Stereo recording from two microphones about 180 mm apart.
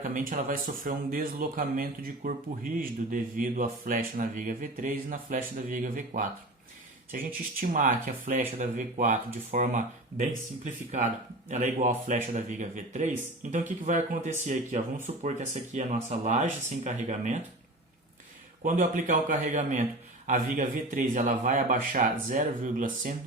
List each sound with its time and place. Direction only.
0.0 s speech: 50° right (ahead or behind)
18.6 s speech: 45° right (ahead or behind)